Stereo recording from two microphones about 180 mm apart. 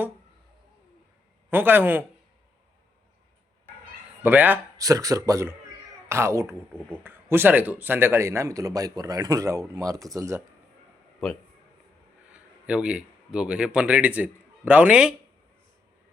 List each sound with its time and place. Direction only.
1.5 s a man's voice: 10° right (ahead or behind)
4.2 s a man's voice: 10° right (ahead or behind)
11.2 s a man's voice: 5° left (ahead or behind)